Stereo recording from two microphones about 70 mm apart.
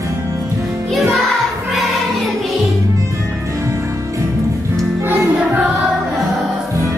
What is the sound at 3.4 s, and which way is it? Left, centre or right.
Music, right.